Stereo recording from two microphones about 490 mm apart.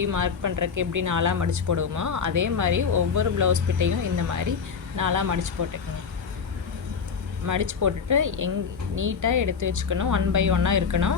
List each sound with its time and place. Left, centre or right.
0.0 s speech: right
7.4 s speech: right